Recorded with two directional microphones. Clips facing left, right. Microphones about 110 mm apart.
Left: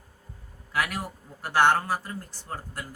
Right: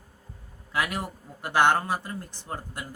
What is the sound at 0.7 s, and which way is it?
A man's voice, 20° right (ahead or behind).